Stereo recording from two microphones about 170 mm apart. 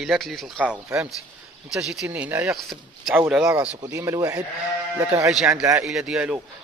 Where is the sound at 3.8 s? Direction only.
15° right (ahead or behind).